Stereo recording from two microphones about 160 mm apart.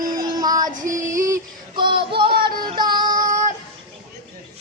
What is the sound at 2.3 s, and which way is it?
Music, 70° right (ahead or behind).